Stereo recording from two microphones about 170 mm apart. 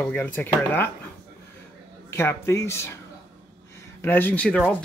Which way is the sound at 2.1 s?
15° left (ahead or behind).